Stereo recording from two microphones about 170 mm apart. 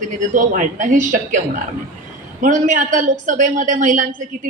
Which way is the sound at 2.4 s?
50° right (ahead or behind).